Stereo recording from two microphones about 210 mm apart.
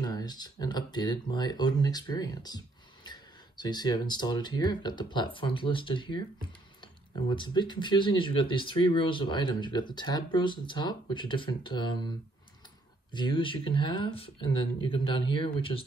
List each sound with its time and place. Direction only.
0.0 s speech: 20° left (ahead or behind)
13.1 s speech: 20° left (ahead or behind)